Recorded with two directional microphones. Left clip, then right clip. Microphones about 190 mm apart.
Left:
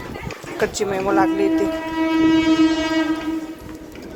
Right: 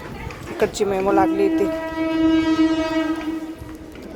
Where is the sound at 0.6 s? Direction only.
30° right (ahead or behind).